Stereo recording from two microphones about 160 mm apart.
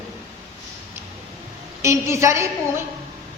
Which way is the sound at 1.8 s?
20° right (ahead or behind).